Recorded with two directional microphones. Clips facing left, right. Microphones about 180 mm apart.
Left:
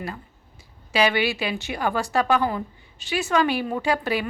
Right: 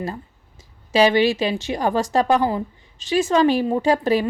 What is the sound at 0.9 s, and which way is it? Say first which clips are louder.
Speech: right 6 dB; 35° right (ahead or behind).